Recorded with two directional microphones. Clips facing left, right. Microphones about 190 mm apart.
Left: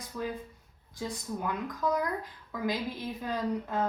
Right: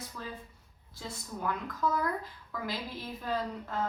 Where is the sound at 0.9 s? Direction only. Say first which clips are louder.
Left 5 dB; 15° left (ahead or behind).